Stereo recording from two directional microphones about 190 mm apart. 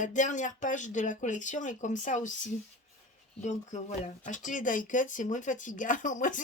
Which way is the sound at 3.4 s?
40° left (ahead or behind).